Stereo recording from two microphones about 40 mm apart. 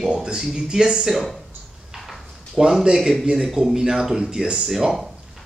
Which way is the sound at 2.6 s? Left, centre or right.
Centre.